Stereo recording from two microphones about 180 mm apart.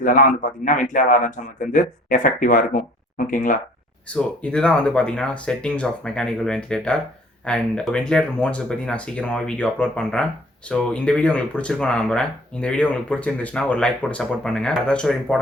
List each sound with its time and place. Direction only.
0.0 s speech: 45° left (ahead or behind)
4.1 s speech: 5° left (ahead or behind)